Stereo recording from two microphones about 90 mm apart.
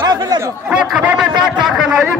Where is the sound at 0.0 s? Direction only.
45° right (ahead or behind).